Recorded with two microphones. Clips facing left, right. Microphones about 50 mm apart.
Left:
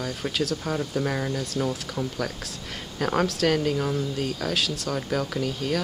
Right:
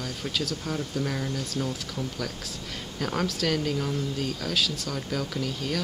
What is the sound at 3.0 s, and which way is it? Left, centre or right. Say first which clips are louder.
Speech: left 5 dB; centre.